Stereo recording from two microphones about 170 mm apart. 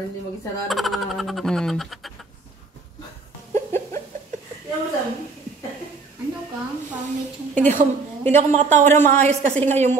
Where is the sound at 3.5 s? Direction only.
15° left (ahead or behind).